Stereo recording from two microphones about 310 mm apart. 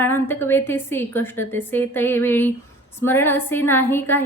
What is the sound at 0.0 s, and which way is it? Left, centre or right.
A woman's voice, centre.